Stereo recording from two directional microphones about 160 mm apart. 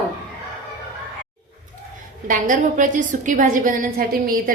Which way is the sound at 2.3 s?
55° right (ahead or behind).